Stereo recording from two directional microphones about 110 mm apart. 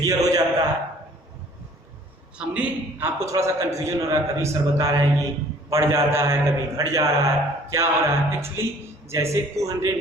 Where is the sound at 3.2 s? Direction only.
25° right (ahead or behind).